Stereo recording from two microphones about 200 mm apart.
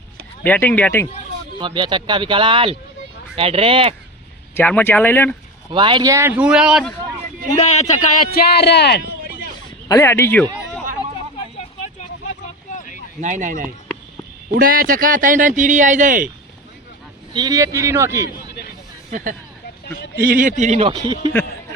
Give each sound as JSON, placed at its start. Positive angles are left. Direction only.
{"t": 0.4, "sound": "speech", "side_deg": 10}
{"t": 1.5, "sound": "speech", "side_deg": -25}
{"t": 4.5, "sound": "speech", "side_deg": 10}
{"t": 5.7, "sound": "speech", "side_deg": -25}
{"t": 7.5, "sound": "speech", "side_deg": 35}
{"t": 9.9, "sound": "speech", "side_deg": 15}
{"t": 12.7, "sound": "a sound", "side_deg": 40}
{"t": 13.2, "sound": "a man's voice", "side_deg": -40}
{"t": 17.3, "sound": "speech", "side_deg": -20}
{"t": 18.3, "sound": "a sound", "side_deg": 50}
{"t": 19.1, "sound": "a man's voice", "side_deg": -40}